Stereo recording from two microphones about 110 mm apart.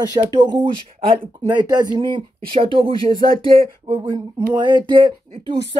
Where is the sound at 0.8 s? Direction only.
60° right (ahead or behind).